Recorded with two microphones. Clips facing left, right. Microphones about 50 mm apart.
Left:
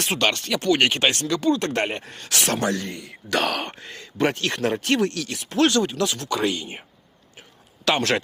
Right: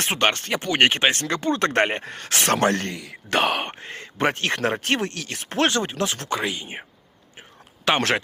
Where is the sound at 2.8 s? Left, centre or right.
Right.